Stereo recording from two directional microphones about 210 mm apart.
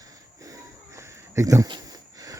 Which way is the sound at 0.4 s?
15° right (ahead or behind).